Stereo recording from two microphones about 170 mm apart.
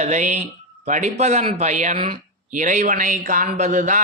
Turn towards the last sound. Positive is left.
turn(degrees=-50)  # may be behind; listen again after turning